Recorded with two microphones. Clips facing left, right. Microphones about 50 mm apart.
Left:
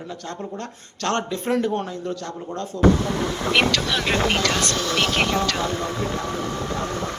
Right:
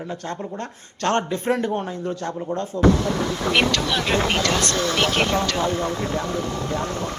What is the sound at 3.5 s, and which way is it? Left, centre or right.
Speech, centre.